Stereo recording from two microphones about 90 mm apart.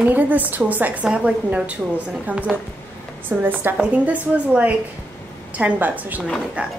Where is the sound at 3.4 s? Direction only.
20° right (ahead or behind).